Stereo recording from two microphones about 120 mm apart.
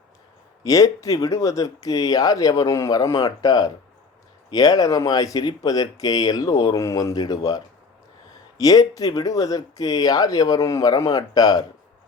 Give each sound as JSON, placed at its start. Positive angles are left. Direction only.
{"t": 0.6, "sound": "speech", "side_deg": 30}